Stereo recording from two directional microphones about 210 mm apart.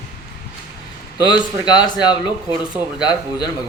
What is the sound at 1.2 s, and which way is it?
Speech, 20° left (ahead or behind).